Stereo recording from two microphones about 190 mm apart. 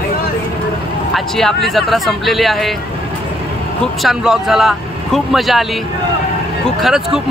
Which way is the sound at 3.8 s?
Centre (ahead or behind).